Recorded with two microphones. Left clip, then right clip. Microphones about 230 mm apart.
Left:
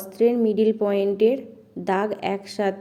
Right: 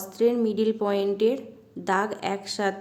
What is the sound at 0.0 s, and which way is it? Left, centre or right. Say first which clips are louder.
A woman's voice: left 3 dB; centre.